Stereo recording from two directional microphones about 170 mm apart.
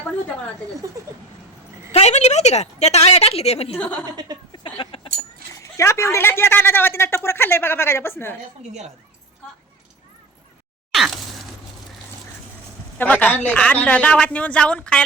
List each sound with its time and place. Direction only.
1.9 s a woman's voice: 40° left (ahead or behind)
3.8 s a woman's voice: 10° left (ahead or behind)
4.5 s a sound: 30° left (ahead or behind)
5.5 s a woman's voice: 15° left (ahead or behind)
13.0 s a woman's voice: 10° left (ahead or behind)